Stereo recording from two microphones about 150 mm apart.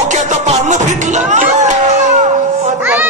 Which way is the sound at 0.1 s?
50° right (ahead or behind).